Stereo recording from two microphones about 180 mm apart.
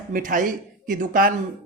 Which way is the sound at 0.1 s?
50° right (ahead or behind).